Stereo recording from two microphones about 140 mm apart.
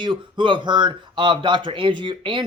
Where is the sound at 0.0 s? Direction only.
35° right (ahead or behind).